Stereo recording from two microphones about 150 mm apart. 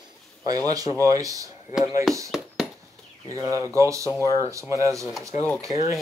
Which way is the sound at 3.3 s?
20° right (ahead or behind).